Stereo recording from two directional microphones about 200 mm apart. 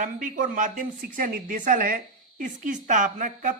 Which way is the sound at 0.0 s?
40° right (ahead or behind).